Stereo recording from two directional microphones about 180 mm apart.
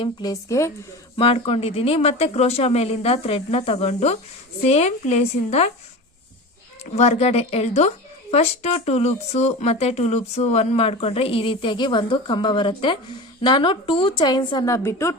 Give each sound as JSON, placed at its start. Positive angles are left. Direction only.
{"t": 0.0, "sound": "a woman's voice", "side_deg": 20}
{"t": 1.1, "sound": "speech", "side_deg": 30}
{"t": 6.8, "sound": "a woman's voice", "side_deg": 40}